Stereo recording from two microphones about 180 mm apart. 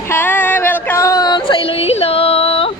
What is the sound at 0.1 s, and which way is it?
Female singing, 10° left (ahead or behind).